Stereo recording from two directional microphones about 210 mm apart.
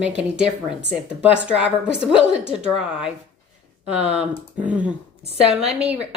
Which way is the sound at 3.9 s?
5° right (ahead or behind).